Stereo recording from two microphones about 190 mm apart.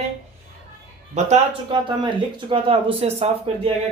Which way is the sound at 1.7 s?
25° right (ahead or behind).